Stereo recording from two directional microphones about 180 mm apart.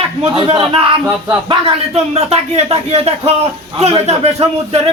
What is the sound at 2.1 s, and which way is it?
Speech, 35° right (ahead or behind).